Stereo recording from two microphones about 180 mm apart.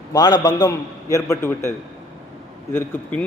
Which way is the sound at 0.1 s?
20° left (ahead or behind).